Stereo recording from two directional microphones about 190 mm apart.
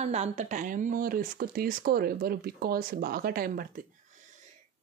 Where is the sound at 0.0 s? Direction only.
35° right (ahead or behind).